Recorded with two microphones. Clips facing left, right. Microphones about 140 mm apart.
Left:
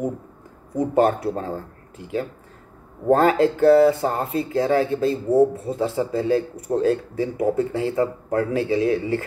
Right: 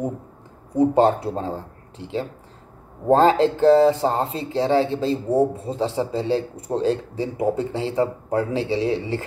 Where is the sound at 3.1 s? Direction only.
25° right (ahead or behind).